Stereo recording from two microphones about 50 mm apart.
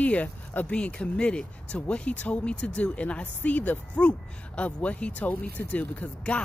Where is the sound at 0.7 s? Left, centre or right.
Left.